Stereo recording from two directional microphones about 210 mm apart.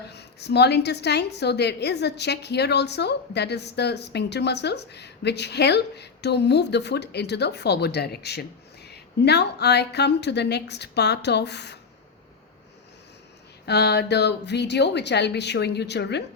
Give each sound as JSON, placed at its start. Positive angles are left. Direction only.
{"t": 0.1, "sound": "a woman's voice", "side_deg": 50}
{"t": 13.7, "sound": "a woman's voice", "side_deg": 50}